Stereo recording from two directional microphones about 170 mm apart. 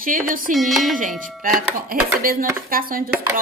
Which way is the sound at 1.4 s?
55° right (ahead or behind).